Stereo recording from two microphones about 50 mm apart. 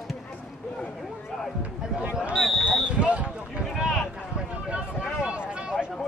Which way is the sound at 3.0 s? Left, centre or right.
Right.